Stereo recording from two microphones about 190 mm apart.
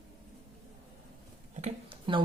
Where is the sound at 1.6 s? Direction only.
30° right (ahead or behind).